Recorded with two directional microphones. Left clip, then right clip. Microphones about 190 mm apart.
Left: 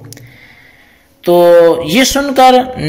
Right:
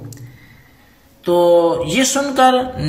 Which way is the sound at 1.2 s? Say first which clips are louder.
Left 7 dB; 50° left (ahead or behind).